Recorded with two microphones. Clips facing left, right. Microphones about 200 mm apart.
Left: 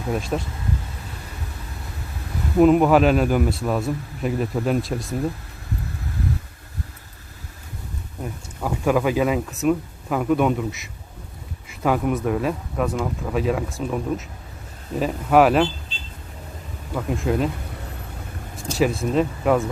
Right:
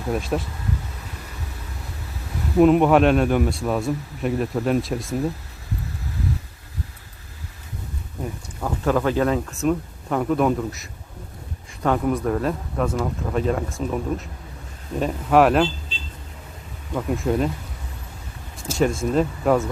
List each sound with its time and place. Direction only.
0.1 s speech: centre (ahead or behind)
2.6 s speech: centre (ahead or behind)
8.2 s speech: 10° left (ahead or behind)
16.9 s speech: centre (ahead or behind)
18.8 s speech: centre (ahead or behind)